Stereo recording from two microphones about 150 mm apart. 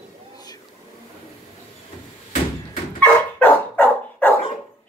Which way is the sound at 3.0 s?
10° left (ahead or behind).